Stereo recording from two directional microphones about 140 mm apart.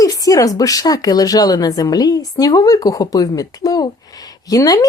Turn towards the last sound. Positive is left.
turn(degrees=25)  # may be behind; listen again after turning